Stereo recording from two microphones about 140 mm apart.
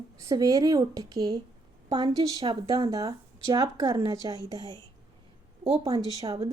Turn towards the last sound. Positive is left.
turn(degrees=-40)  # may be behind; listen again after turning